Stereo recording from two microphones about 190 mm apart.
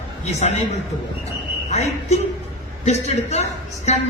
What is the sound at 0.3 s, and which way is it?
A man's voice, 35° left (ahead or behind).